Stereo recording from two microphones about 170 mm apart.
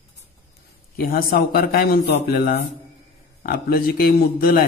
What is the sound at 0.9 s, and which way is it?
A man's voice, 60° left (ahead or behind).